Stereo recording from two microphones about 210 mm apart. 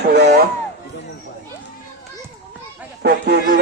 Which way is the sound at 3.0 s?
50° right (ahead or behind).